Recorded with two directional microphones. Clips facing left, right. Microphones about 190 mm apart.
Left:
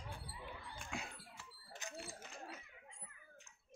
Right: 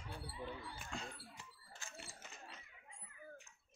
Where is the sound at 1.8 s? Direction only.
20° left (ahead or behind).